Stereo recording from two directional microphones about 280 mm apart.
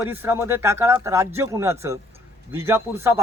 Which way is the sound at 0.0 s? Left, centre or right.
Centre.